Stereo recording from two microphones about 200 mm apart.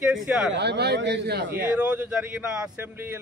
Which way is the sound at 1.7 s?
5° right (ahead or behind).